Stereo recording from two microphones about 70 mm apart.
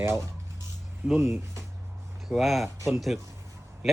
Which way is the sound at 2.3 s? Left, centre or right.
Centre.